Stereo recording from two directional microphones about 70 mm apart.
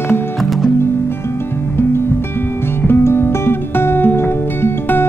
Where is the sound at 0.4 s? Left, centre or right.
Centre.